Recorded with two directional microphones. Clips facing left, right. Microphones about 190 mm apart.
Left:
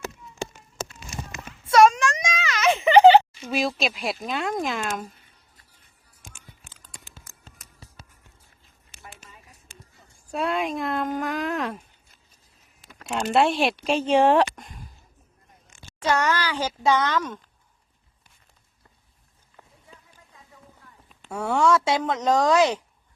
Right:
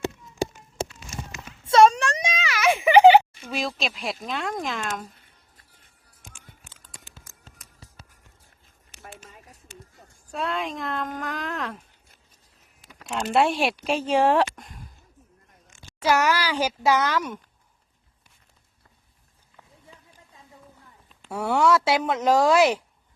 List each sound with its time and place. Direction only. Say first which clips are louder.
1.6 s a sound: even; 25° right (ahead or behind)
2.4 s a sound: left 1 dB; 10° right (ahead or behind)
3.5 s speech: left 4 dB; 5° left (ahead or behind)
10.3 s speech: left 3 dB; 10° left (ahead or behind)
13.1 s speech: left 1 dB; centre (ahead or behind)
16.0 s speech: right 1 dB; 10° right (ahead or behind)
21.2 s speech: even; 5° right (ahead or behind)